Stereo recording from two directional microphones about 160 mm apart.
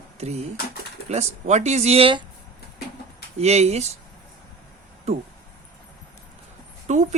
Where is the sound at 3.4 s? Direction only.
45° right (ahead or behind).